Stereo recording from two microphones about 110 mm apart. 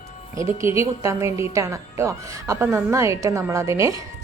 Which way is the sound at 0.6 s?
25° right (ahead or behind).